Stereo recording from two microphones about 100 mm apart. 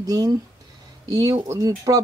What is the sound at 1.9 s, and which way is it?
Speech, 35° right (ahead or behind).